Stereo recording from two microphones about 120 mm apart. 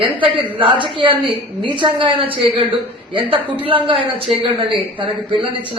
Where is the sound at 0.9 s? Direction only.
45° right (ahead or behind).